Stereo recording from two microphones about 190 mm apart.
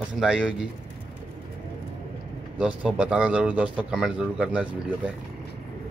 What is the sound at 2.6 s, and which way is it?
Speech, 5° right (ahead or behind).